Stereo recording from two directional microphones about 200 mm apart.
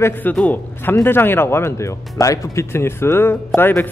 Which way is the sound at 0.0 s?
10° left (ahead or behind).